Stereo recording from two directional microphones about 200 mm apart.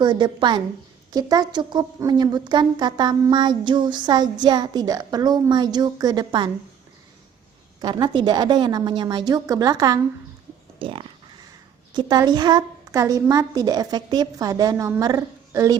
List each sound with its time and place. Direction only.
0.0 s a woman's voice: 20° right (ahead or behind)
7.8 s a woman's voice: 20° right (ahead or behind)